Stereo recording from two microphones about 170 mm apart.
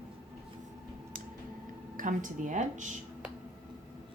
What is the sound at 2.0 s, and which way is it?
Speech, 50° right (ahead or behind).